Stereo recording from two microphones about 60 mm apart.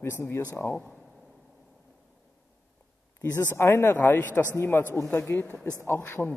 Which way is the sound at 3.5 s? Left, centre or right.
Left.